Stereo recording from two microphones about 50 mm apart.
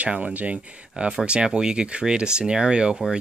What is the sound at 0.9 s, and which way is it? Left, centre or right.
Speech, centre.